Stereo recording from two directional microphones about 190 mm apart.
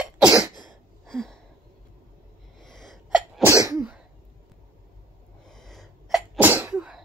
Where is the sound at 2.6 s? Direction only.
Centre (ahead or behind).